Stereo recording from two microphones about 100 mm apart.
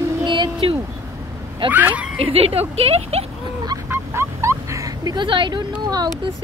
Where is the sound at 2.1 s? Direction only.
75° right (ahead or behind).